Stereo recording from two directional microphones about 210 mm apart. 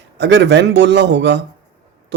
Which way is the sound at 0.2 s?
55° right (ahead or behind).